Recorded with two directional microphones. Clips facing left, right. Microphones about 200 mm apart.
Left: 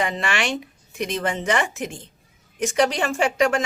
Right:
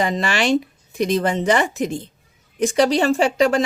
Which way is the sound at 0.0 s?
35° right (ahead or behind).